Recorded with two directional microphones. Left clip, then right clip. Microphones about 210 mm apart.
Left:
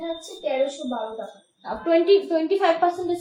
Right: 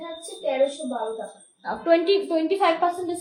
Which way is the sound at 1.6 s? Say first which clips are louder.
Left 1 dB; 15° right (ahead or behind).